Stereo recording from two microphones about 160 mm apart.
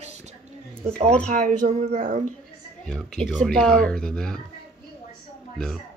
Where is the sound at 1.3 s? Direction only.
55° right (ahead or behind).